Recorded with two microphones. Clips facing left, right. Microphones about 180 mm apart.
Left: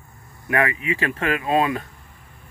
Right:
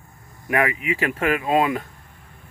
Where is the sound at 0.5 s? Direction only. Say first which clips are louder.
Even; 15° right (ahead or behind).